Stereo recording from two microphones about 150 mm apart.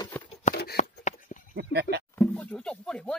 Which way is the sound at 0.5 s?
90° left.